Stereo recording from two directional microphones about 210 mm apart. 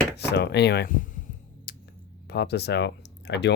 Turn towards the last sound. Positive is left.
turn(degrees=55)  # may be behind; listen again after turning